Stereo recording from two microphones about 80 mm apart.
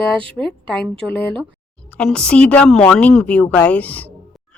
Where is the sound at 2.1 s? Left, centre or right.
Centre.